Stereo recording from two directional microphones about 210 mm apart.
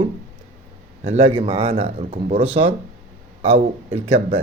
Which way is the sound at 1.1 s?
30° right (ahead or behind).